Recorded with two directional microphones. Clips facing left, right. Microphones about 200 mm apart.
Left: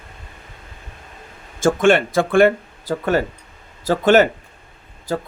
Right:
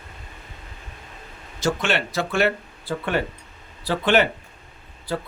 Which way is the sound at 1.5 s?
50° left (ahead or behind).